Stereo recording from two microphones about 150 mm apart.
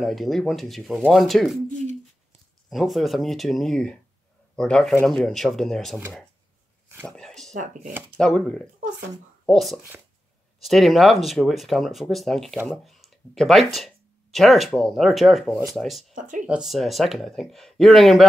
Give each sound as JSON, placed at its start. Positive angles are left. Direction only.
{"t": 0.0, "sound": "speech", "side_deg": 0}
{"t": 2.7, "sound": "speech", "side_deg": 0}
{"t": 7.1, "sound": "a sound", "side_deg": 0}
{"t": 8.2, "sound": "speech", "side_deg": 5}
{"t": 16.2, "sound": "speech", "side_deg": -60}
{"t": 16.4, "sound": "speech", "side_deg": -5}